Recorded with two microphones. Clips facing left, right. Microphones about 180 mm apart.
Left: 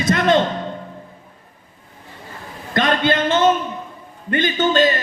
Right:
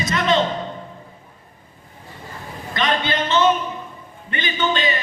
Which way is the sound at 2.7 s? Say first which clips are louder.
Left 4 dB; 50° left (ahead or behind).